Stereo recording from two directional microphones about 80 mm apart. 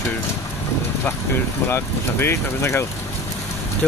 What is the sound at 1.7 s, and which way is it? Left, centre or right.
Speech, left.